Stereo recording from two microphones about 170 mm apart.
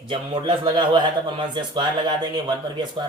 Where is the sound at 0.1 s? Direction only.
30° right (ahead or behind).